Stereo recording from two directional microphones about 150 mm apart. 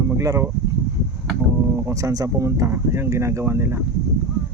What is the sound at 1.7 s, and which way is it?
Speech, 20° right (ahead or behind).